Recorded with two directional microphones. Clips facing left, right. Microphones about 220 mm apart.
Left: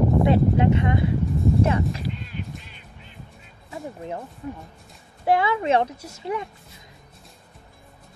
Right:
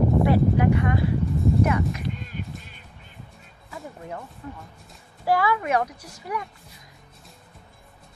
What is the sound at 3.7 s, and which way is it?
Music, 25° left (ahead or behind).